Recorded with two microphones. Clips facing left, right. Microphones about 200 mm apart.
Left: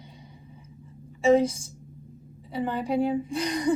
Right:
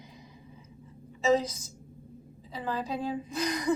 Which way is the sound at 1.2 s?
30° left (ahead or behind).